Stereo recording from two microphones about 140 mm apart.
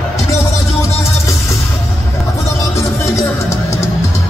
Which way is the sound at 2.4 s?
20° left (ahead or behind).